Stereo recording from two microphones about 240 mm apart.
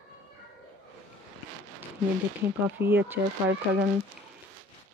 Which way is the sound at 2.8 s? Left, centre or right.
Centre.